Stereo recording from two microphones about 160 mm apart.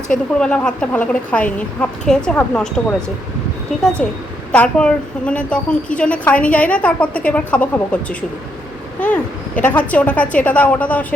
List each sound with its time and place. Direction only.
0.1 s a woman's voice: 5° left (ahead or behind)
4.0 s a woman's voice: 5° left (ahead or behind)
9.0 s a sound: 10° left (ahead or behind)
9.9 s a woman's voice: 10° left (ahead or behind)